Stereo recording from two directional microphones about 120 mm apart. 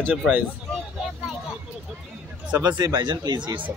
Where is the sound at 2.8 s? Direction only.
40° right (ahead or behind).